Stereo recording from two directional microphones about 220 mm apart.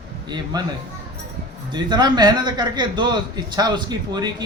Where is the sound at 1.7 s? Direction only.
20° right (ahead or behind).